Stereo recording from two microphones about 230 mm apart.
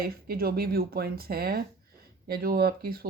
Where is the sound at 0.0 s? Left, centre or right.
Right.